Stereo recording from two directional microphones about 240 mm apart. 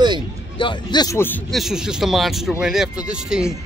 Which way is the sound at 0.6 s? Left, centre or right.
Centre.